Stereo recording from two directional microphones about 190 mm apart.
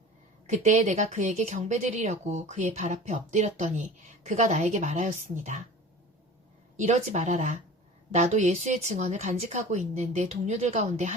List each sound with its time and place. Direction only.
0.4 s speech: 35° right (ahead or behind)
6.7 s speech: 40° right (ahead or behind)